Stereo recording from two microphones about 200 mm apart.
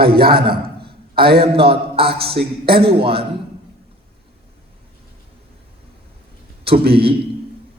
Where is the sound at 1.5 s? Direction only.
30° right (ahead or behind).